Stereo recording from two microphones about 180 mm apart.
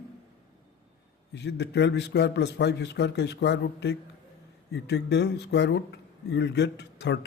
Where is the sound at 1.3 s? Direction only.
75° left (ahead or behind).